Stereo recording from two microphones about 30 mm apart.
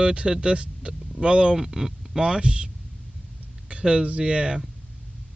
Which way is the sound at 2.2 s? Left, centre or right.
Right.